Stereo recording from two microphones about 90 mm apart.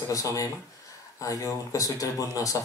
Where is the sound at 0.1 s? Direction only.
40° left (ahead or behind).